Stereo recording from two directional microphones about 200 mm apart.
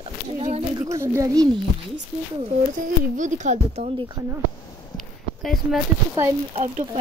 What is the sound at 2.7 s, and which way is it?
Speech, 40° right (ahead or behind).